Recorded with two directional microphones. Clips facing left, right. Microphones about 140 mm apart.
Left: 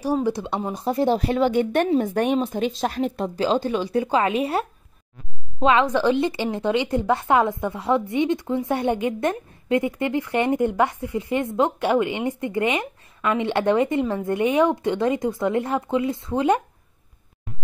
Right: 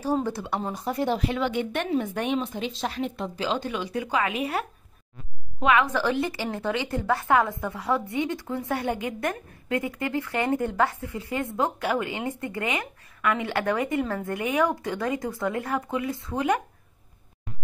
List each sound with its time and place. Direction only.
0.0 s speech: 10° left (ahead or behind)
0.8 s a woman's voice: 30° left (ahead or behind)